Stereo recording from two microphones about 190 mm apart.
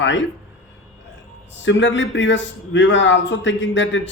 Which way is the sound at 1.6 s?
75° left (ahead or behind).